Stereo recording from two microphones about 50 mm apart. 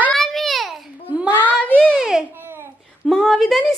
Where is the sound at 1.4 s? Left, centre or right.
Left.